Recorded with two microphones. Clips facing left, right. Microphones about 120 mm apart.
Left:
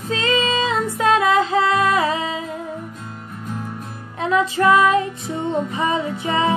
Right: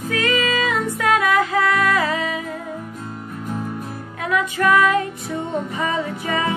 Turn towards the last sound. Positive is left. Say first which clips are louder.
# left 3 dB
turn(degrees=20)  # may be behind; listen again after turning